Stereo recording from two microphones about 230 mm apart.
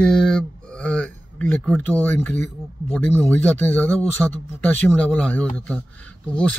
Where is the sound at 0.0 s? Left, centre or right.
Centre.